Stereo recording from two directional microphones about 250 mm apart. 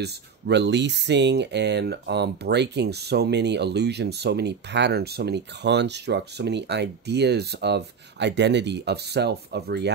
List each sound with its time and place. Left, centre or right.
0.0 s speech: right